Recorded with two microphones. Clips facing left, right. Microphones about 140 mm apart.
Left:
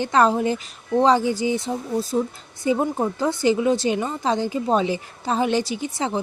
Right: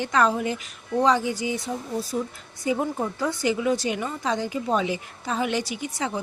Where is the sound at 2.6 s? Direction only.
30° left (ahead or behind).